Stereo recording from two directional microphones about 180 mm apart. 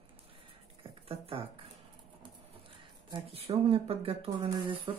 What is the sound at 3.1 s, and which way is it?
Speech, 30° right (ahead or behind).